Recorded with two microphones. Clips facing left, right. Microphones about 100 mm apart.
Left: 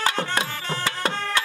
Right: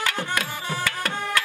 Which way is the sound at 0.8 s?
25° left (ahead or behind).